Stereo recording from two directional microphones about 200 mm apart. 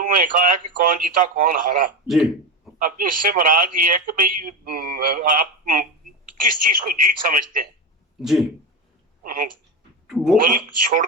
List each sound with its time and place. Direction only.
0.0 s speech: 40° right (ahead or behind)
8.2 s speech: centre (ahead or behind)
9.2 s speech: 45° right (ahead or behind)
10.1 s speech: centre (ahead or behind)
10.4 s speech: 40° right (ahead or behind)